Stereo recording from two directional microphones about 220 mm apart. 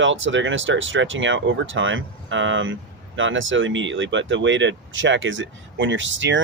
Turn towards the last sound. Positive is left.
turn(degrees=-55)  # may be behind; listen again after turning